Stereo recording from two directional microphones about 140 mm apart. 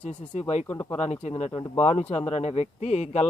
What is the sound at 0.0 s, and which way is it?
Speech, 50° left (ahead or behind).